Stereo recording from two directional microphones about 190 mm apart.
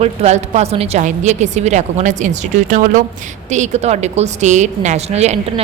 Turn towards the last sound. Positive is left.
turn(degrees=-35)  # may be behind; listen again after turning